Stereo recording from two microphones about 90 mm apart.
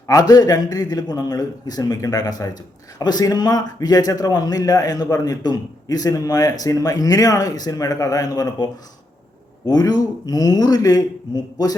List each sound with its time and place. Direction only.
0.1 s a man's voice: 45° left (ahead or behind)